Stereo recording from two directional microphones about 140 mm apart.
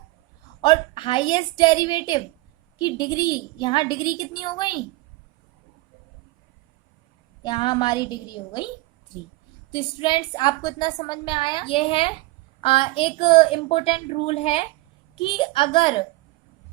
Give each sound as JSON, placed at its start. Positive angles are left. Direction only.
{"t": 0.6, "sound": "a woman's voice", "side_deg": 35}
{"t": 7.4, "sound": "a woman's voice", "side_deg": 35}
{"t": 9.7, "sound": "a woman's voice", "side_deg": 35}